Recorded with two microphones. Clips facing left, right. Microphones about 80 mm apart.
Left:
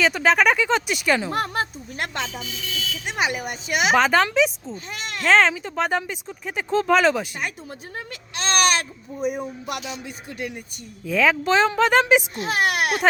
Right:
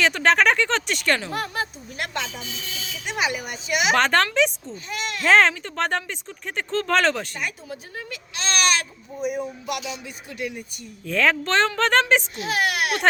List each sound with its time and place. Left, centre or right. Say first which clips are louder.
0.0 s speech: even; centre
1.3 s speech: left 3 dB; left
2.6 s buzzer: left 5 dB; right
3.1 s speech: even; left
3.9 s a woman's voice: left 2 dB; centre
4.7 s speech: right 2 dB; left
5.2 s speech: even; centre
7.9 s a sound: left 5 dB; left
11.0 s a woman's voice: left 2 dB; centre
12.4 s speech: left 2 dB; left